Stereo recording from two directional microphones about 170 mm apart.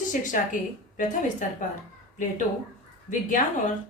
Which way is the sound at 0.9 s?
50° left (ahead or behind).